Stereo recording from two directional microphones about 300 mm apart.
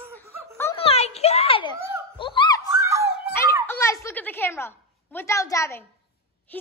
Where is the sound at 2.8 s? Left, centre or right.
Centre.